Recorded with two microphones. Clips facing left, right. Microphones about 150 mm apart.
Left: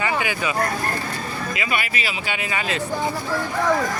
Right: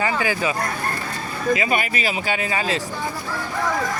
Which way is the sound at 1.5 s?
40° right (ahead or behind).